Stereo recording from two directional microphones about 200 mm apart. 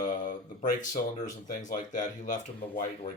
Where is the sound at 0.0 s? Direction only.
40° left (ahead or behind).